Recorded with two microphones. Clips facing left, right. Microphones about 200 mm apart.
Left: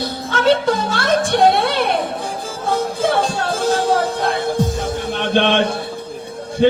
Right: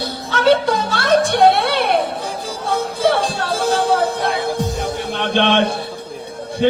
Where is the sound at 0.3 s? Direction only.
50° left (ahead or behind).